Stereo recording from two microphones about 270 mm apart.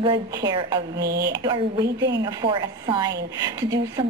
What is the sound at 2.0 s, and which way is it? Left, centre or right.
Speech, right.